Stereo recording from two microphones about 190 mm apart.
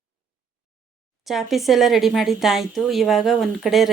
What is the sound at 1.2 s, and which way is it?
A woman's voice, centre (ahead or behind).